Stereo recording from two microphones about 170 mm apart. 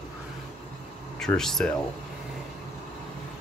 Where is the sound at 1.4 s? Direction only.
5° left (ahead or behind).